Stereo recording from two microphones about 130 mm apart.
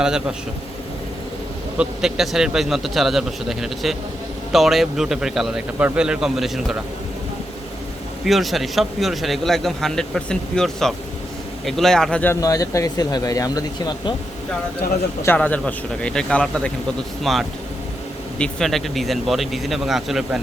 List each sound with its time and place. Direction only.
0.0 s speech: 5° right (ahead or behind)
1.8 s speech: 5° right (ahead or behind)
8.2 s speech: centre (ahead or behind)
12.3 s speech: 25° left (ahead or behind)
15.2 s a man's voice: 15° left (ahead or behind); by 20.4 s centre (ahead or behind)